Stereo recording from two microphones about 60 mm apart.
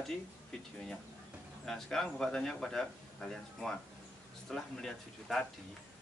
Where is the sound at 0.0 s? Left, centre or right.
Centre.